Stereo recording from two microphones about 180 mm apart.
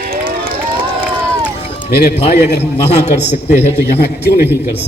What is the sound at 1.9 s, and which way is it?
Speech, 60° left (ahead or behind).